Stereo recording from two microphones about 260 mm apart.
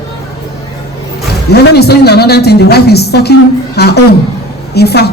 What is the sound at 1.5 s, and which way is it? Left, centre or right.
Speech, left.